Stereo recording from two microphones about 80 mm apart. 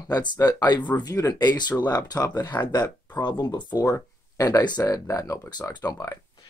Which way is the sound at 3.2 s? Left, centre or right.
Left.